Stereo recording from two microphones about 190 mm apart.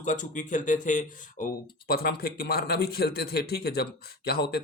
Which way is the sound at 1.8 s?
55° left (ahead or behind).